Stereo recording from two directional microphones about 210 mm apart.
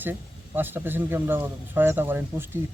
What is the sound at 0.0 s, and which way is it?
Speech, 10° right (ahead or behind).